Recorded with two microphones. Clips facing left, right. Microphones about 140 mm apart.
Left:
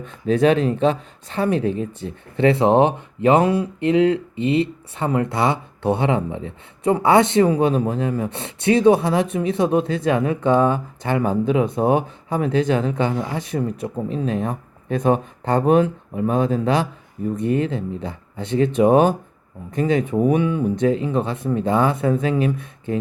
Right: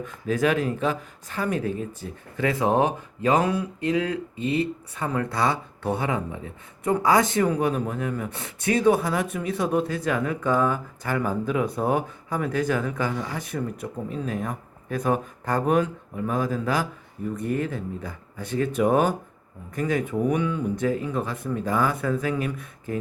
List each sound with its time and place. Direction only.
0.0 s speech: 25° left (ahead or behind)